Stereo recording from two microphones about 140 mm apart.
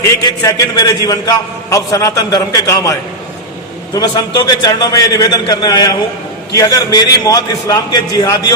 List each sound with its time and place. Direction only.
0.3 s a man's voice: 25° left (ahead or behind)
3.9 s a man's voice: 30° left (ahead or behind)